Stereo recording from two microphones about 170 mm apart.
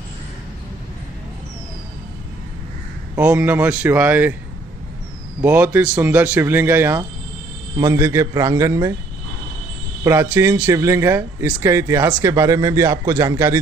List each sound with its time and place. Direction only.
3.2 s speech: 10° right (ahead or behind)
5.4 s a man's voice: 10° right (ahead or behind)
10.0 s speech: 15° right (ahead or behind)